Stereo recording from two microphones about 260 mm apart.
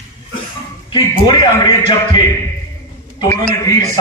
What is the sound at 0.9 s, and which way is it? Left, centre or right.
Speech, centre.